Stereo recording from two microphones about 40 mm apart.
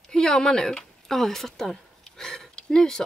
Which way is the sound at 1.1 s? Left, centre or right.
Centre.